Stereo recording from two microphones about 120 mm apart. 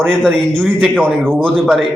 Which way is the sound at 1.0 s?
20° right (ahead or behind).